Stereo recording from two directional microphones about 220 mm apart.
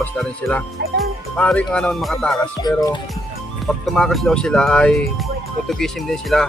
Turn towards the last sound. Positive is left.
turn(degrees=0)  # may be behind; listen again after turning